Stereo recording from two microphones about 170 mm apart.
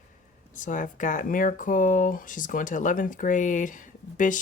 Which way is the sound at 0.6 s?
50° left (ahead or behind).